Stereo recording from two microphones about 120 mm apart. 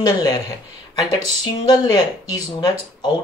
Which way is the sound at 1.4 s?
35° left (ahead or behind).